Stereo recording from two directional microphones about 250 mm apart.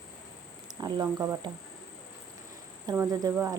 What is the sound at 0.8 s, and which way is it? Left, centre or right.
Speech, centre.